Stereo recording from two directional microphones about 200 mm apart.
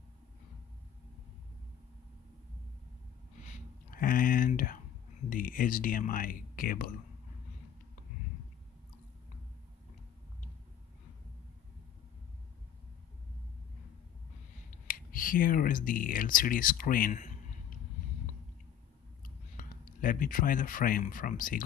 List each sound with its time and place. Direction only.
3.4 s a sound: 45° left (ahead or behind)
5.3 s speech: 45° left (ahead or behind)
14.7 s speech: 45° left (ahead or behind)
19.2 s speech: 45° left (ahead or behind)